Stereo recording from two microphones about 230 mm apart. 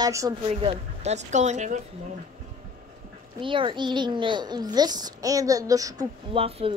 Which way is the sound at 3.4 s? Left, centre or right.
Right.